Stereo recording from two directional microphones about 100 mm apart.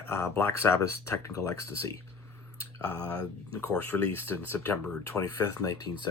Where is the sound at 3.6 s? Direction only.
20° left (ahead or behind).